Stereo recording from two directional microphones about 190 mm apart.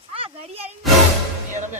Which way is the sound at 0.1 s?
30° right (ahead or behind).